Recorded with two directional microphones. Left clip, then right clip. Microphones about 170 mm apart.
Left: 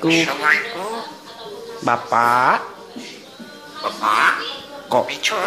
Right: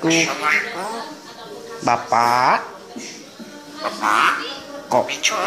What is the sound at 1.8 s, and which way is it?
Speech, 15° left (ahead or behind).